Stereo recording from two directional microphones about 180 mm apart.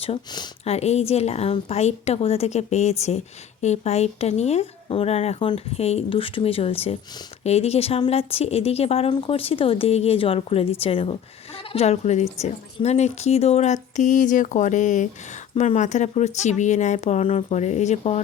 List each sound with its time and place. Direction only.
0.0 s speech: 30° left (ahead or behind)
0.6 s speech: 35° left (ahead or behind)